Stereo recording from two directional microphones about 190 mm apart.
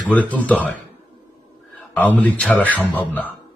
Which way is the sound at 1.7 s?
5° left (ahead or behind).